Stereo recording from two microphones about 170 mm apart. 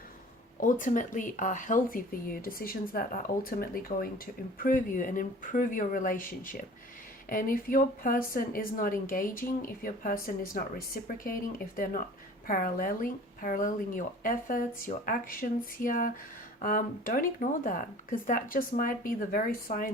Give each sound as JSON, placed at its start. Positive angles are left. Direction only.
{"t": 0.6, "sound": "speech", "side_deg": 50}